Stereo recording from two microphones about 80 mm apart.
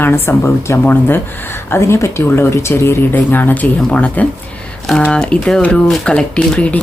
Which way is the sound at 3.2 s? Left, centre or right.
Left.